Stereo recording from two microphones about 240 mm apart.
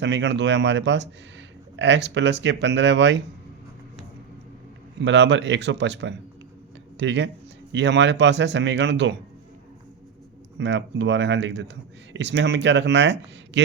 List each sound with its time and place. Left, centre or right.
0.0 s speech: right
5.0 s speech: right
10.6 s speech: right